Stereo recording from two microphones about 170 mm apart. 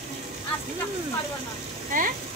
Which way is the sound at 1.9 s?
55° right (ahead or behind).